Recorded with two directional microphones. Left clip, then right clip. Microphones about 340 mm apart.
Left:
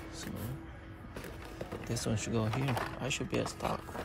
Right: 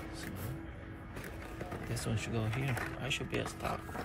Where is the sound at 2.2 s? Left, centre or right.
Left.